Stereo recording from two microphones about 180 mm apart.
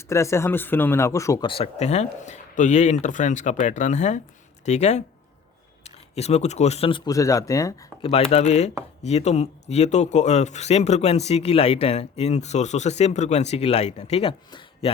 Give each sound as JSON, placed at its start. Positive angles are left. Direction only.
{"t": 0.1, "sound": "speech", "side_deg": 15}
{"t": 1.5, "sound": "speech", "side_deg": 30}
{"t": 8.0, "sound": "speech", "side_deg": 35}